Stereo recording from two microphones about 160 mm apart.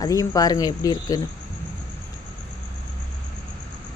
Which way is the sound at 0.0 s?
20° left (ahead or behind).